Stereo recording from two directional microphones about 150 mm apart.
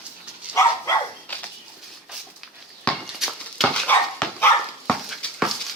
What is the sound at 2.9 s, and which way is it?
Dog, 5° left (ahead or behind).